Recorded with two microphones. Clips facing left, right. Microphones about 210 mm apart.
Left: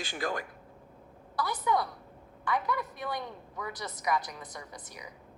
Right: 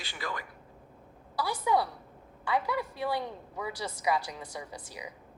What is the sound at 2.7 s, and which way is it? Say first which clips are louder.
Speech: right 4 dB; 30° right (ahead or behind).